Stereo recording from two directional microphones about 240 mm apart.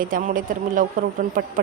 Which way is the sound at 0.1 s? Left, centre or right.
Right.